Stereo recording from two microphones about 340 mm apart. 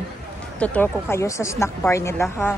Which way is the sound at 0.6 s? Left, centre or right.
Centre.